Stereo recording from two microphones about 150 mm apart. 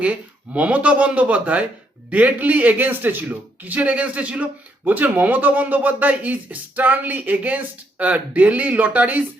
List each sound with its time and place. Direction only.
0.0 s speech: 10° right (ahead or behind)